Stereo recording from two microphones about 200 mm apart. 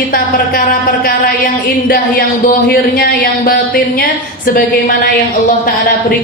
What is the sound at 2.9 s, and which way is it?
A woman's voice, 50° left (ahead or behind).